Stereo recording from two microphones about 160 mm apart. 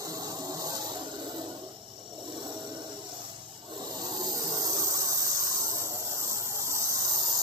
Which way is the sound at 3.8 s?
25° right (ahead or behind).